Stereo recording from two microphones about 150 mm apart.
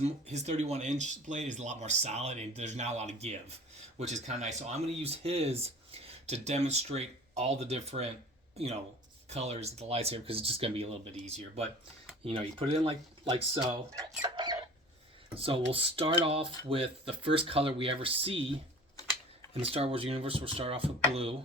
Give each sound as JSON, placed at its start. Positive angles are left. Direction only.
{"t": 0.0, "sound": "speech", "side_deg": -50}
{"t": 13.5, "sound": "chicken", "side_deg": -30}
{"t": 15.4, "sound": "speech", "side_deg": -40}
{"t": 19.5, "sound": "speech", "side_deg": -40}